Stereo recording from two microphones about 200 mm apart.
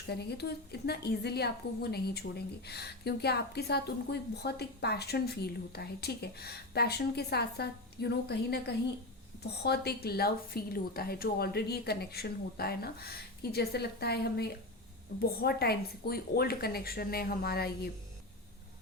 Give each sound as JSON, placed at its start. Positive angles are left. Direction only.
{"t": 0.1, "sound": "a woman's voice", "side_deg": 55}